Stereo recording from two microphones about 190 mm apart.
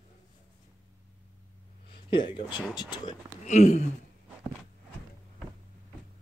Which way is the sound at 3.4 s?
35° left (ahead or behind).